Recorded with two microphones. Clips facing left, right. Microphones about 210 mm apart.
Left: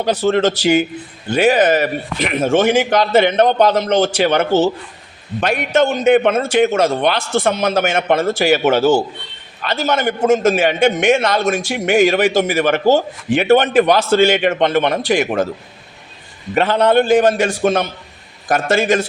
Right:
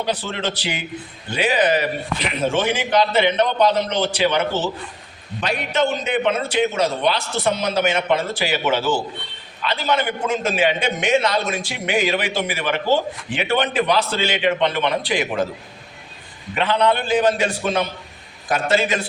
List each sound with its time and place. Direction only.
0.0 s a man's voice: 45° left (ahead or behind)
16.6 s a man's voice: 45° left (ahead or behind)